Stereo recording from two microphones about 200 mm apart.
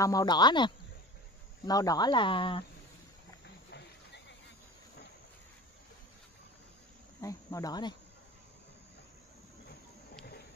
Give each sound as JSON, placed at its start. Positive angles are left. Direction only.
{"t": 0.0, "sound": "speech", "side_deg": 20}
{"t": 3.7, "sound": "a sound", "side_deg": 60}
{"t": 7.2, "sound": "speech", "side_deg": 15}